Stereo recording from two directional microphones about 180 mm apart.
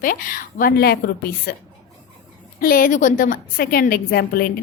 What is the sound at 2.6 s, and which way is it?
A woman's voice, 55° left (ahead or behind).